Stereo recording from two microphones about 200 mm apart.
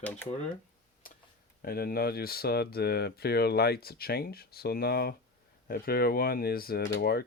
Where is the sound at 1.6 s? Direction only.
50° left (ahead or behind).